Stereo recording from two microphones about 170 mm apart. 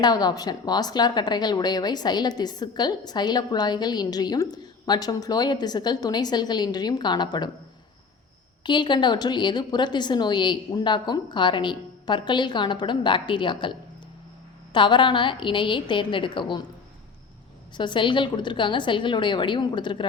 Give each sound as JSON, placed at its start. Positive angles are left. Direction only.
{"t": 0.0, "sound": "a woman's voice", "side_deg": 25}
{"t": 8.6, "sound": "a woman's voice", "side_deg": 25}
{"t": 17.7, "sound": "a woman's voice", "side_deg": 30}